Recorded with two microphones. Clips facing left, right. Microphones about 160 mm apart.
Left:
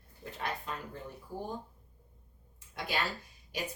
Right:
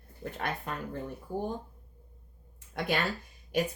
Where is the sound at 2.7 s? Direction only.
55° right (ahead or behind).